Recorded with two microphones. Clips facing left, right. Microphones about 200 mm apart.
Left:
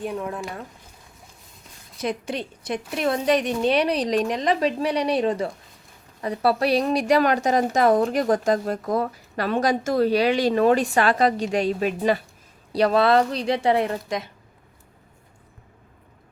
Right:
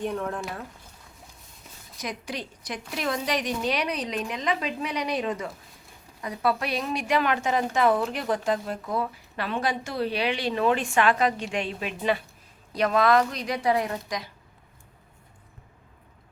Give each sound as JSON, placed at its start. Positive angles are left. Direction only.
{"t": 0.0, "sound": "speech", "side_deg": 5}
{"t": 2.0, "sound": "a woman's voice", "side_deg": 25}